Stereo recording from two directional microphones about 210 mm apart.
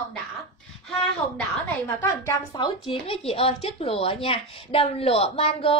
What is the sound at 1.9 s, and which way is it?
Speech, 15° left (ahead or behind).